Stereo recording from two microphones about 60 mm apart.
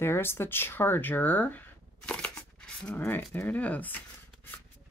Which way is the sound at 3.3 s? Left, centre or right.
Left.